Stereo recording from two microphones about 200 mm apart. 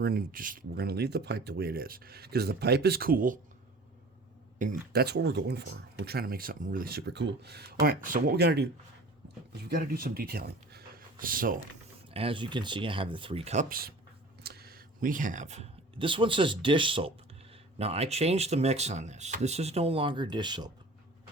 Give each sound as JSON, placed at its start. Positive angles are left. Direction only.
{"t": 0.0, "sound": "speech", "side_deg": -50}
{"t": 4.5, "sound": "speech", "side_deg": -45}
{"t": 12.1, "sound": "speech", "side_deg": -25}